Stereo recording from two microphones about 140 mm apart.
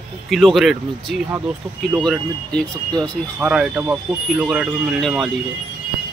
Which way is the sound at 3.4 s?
5° right (ahead or behind).